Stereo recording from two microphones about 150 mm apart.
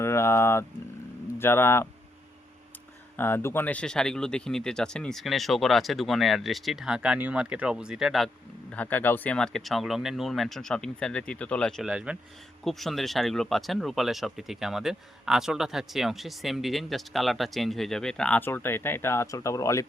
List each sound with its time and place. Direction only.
0.0 s a sound: 20° left (ahead or behind)
1.4 s speech: 15° left (ahead or behind)
3.2 s speech: 15° left (ahead or behind); by 8.3 s centre (ahead or behind)
8.7 s speech: 10° left (ahead or behind)